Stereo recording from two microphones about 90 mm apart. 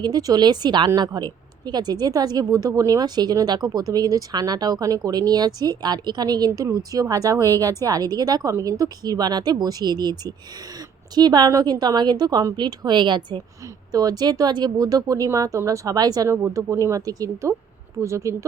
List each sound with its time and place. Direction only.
0.0 s speech: 45° right (ahead or behind)
13.9 s speech: 45° right (ahead or behind)
16.3 s speech: 35° right (ahead or behind)